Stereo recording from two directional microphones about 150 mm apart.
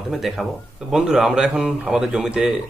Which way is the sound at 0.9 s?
5° right (ahead or behind).